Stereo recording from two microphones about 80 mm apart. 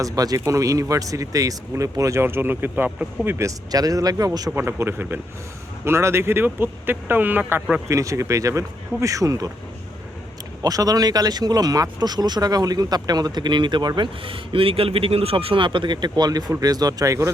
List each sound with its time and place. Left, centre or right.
0.0 s speech: right
2.2 s speech: right
3.4 s speech: right
4.5 s speech: right
7.9 s speech: right
10.6 s speech: right
16.5 s speech: right